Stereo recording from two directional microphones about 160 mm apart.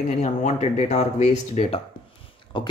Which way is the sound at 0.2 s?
45° left (ahead or behind).